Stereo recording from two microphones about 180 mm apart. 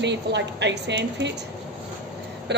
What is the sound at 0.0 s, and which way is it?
A woman's voice, 75° right (ahead or behind).